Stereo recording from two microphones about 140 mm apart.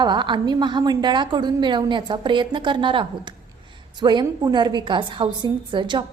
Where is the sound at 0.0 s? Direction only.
35° right (ahead or behind).